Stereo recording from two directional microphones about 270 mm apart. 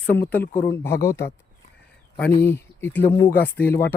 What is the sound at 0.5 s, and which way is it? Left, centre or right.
Speech, left.